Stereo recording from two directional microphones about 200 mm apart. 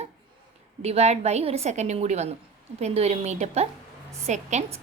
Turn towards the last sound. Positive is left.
turn(degrees=-35)  # may be behind; listen again after turning